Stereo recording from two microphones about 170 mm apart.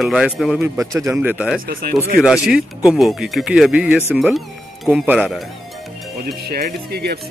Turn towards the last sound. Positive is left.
turn(degrees=-65)  # may be behind; listen again after turning